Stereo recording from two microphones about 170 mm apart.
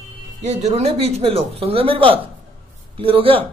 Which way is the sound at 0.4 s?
40° right (ahead or behind).